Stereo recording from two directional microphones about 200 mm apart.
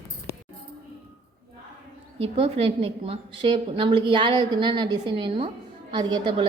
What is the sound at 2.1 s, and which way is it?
A woman's voice, 30° right (ahead or behind).